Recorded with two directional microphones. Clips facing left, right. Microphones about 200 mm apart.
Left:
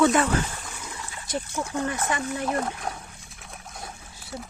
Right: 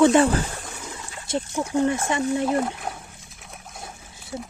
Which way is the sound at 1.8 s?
25° right (ahead or behind).